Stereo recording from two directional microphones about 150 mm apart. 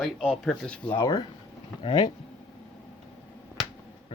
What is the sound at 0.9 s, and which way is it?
Speech, 25° left (ahead or behind).